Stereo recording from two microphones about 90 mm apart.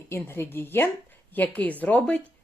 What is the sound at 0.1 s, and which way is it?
Speech, 25° left (ahead or behind).